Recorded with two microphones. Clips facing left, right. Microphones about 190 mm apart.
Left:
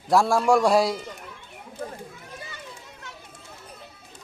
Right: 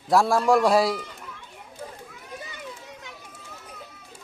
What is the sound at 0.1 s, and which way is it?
Speech, centre (ahead or behind).